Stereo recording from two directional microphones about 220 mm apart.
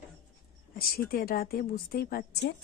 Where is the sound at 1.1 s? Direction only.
45° left (ahead or behind).